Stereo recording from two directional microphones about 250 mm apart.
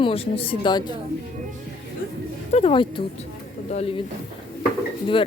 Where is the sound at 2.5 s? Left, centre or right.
Left.